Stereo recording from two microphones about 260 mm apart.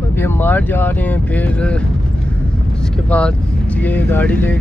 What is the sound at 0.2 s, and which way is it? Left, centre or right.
Speech, centre.